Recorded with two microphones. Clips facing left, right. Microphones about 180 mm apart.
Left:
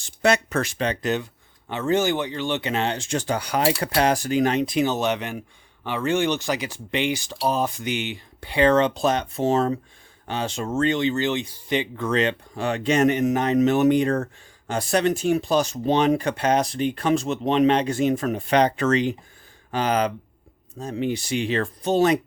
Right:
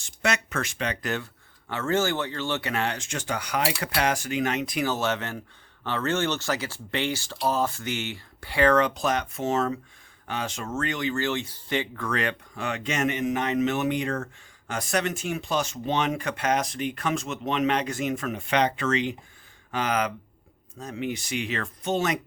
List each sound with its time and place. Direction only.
0.0 s speech: 35° left (ahead or behind)
1.0 s speech: 20° left (ahead or behind); by 22.2 s 35° left (ahead or behind)